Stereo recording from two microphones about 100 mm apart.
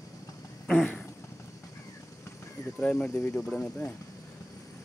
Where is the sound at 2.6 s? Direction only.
40° left (ahead or behind).